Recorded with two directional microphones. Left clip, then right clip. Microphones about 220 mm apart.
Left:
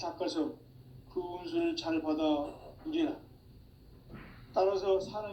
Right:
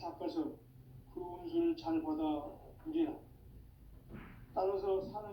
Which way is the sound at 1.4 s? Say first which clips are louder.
Left 1 dB; 45° left (ahead or behind).